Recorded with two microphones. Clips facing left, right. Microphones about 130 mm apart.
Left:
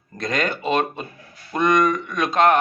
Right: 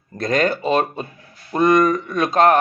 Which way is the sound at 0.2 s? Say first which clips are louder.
Right 5 dB; 35° right (ahead or behind).